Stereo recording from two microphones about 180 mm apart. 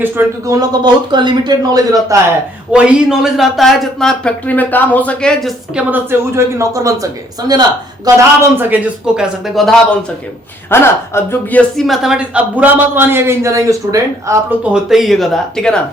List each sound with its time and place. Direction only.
0.0 s a man's voice: 15° right (ahead or behind)
1.1 s a man's voice: 25° right (ahead or behind)
2.7 s speech: 5° right (ahead or behind)
5.9 s a man's voice: 15° right (ahead or behind)
10.7 s speech: 15° left (ahead or behind)
11.8 s a man's voice: centre (ahead or behind); by 14.7 s 15° right (ahead or behind)
14.7 s speech: centre (ahead or behind)